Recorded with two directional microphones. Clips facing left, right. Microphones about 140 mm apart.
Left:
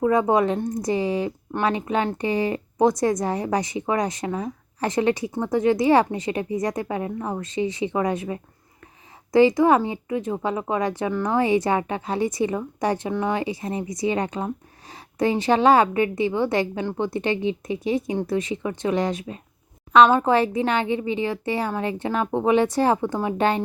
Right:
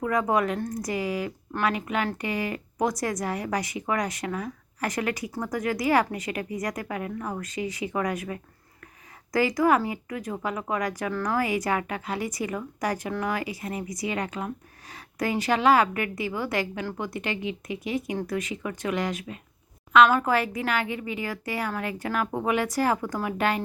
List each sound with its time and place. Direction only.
0.0 s a woman's voice: 25° left (ahead or behind)